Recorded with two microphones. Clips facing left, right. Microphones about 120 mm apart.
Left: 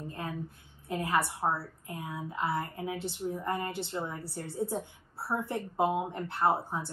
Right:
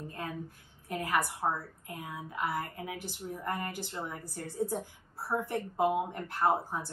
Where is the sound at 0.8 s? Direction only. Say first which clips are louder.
Left 2 dB; 25° left (ahead or behind).